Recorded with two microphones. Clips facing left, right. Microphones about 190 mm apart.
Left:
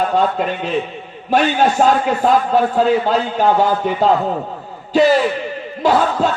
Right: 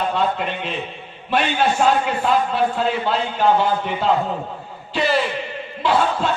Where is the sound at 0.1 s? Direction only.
40° left (ahead or behind).